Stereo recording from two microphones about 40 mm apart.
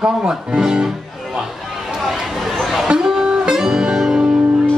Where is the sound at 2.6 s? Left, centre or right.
Centre.